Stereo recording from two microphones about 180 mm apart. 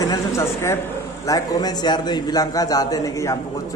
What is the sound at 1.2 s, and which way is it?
A man's voice, 20° left (ahead or behind).